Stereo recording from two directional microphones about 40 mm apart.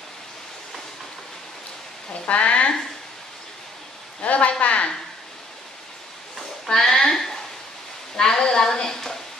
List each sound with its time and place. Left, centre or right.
2.2 s speech: left
4.2 s speech: left
6.6 s a woman's voice: centre